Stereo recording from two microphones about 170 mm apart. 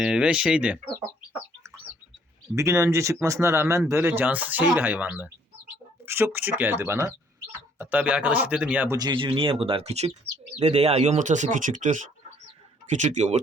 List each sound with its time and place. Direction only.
0.0 s speech: 5° right (ahead or behind)
2.6 s speech: 15° right (ahead or behind)
9.0 s speech: 25° right (ahead or behind); by 13.4 s 40° right (ahead or behind)